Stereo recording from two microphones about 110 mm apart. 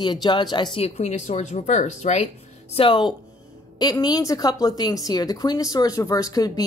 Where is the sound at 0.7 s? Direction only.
75° left (ahead or behind).